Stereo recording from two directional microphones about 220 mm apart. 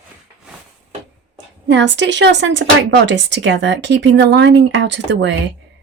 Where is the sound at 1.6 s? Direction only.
55° right (ahead or behind).